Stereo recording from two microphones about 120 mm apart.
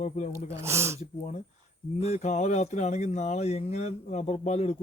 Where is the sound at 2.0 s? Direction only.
65° left (ahead or behind).